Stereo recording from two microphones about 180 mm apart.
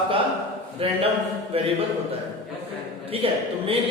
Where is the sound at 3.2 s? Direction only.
30° right (ahead or behind).